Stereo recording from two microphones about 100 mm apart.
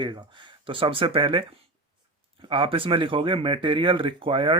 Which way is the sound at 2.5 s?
60° right (ahead or behind).